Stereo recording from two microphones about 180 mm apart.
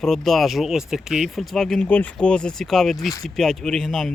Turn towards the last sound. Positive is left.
turn(degrees=0)  # may be behind; listen again after turning